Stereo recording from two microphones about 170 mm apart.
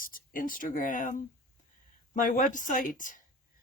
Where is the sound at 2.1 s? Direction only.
50° left (ahead or behind).